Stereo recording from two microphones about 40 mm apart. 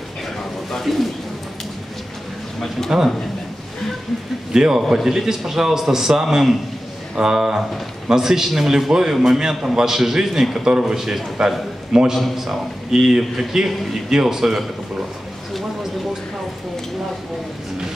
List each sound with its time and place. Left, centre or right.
0.7 s bird: centre
2.9 s a man's voice: centre
4.6 s a man's voice: centre
4.8 s a man's voice: centre